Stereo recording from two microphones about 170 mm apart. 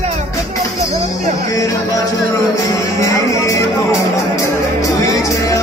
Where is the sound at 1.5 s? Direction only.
20° left (ahead or behind).